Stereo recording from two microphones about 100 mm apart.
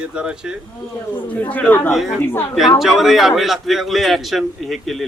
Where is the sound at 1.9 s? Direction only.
Centre (ahead or behind).